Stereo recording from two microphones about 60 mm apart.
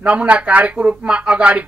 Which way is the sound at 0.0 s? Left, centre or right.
Centre.